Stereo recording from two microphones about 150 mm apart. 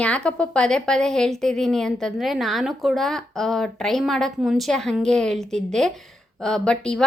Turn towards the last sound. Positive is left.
turn(degrees=5)  # may be behind; listen again after turning